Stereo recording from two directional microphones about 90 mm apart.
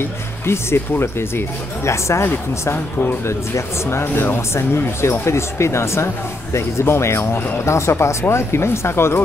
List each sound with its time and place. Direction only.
0.5 s speech: 30° left (ahead or behind)